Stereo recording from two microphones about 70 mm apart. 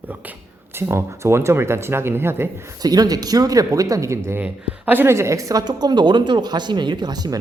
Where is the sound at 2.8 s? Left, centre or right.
Right.